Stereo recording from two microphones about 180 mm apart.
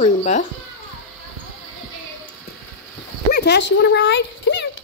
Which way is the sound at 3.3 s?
65° left (ahead or behind).